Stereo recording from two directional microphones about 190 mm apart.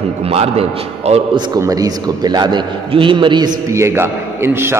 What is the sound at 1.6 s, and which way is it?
A man's voice, 20° right (ahead or behind).